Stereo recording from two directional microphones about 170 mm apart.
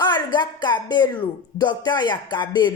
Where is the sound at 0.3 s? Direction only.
25° left (ahead or behind).